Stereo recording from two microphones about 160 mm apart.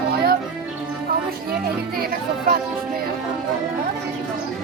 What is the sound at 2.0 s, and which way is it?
Speech, 75° right (ahead or behind).